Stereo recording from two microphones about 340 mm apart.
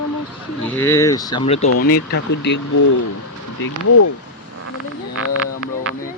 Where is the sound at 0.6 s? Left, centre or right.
Centre.